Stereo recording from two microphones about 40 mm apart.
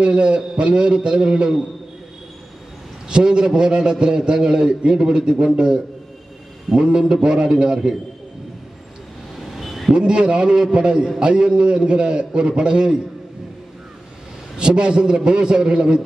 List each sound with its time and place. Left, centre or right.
0.0 s a man's voice: right
3.1 s a man's voice: right
9.6 s vehicle: centre
9.9 s a man's voice: right
14.6 s a man's voice: right